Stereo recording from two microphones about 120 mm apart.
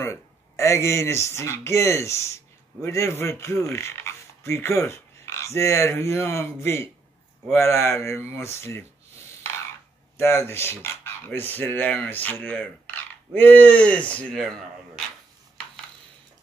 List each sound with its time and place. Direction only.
0.0 s speech: 25° left (ahead or behind)
10.1 s speech: 20° left (ahead or behind); by 14.7 s 5° left (ahead or behind)